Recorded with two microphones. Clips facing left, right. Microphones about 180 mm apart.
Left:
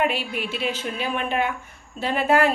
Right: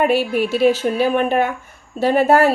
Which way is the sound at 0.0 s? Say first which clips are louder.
Right 8 dB; 40° right (ahead or behind).